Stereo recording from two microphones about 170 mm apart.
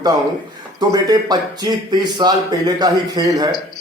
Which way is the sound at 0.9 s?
20° right (ahead or behind).